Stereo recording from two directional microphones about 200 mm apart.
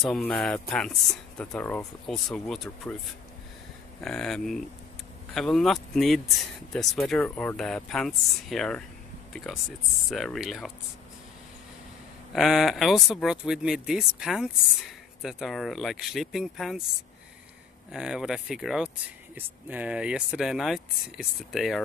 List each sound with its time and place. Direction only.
0.0 s speech: 5° left (ahead or behind)
4.0 s speech: centre (ahead or behind)
12.3 s speech: centre (ahead or behind)
17.9 s speech: 5° right (ahead or behind)